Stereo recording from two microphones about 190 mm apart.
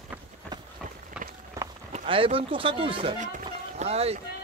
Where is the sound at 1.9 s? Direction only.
30° right (ahead or behind).